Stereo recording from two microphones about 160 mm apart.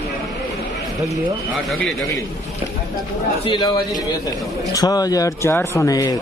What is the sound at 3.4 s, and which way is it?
Speech, 25° left (ahead or behind).